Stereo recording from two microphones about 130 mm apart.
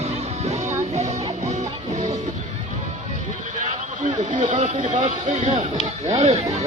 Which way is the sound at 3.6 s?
70° right (ahead or behind).